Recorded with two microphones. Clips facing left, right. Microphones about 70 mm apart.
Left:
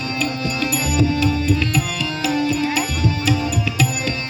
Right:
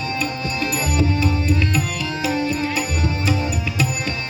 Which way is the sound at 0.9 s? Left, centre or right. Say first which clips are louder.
Left 3 dB; right.